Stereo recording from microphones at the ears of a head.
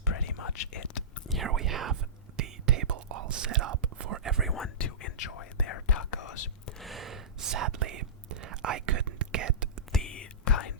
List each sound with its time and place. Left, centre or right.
0.1 s whispering: left
1.4 s whispering: right
4.5 s speech: left
7.0 s whispering: right
10.0 s whispering: left